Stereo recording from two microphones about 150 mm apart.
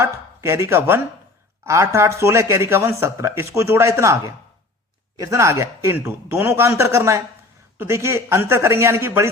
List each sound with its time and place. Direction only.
0.0 s speech: 20° right (ahead or behind)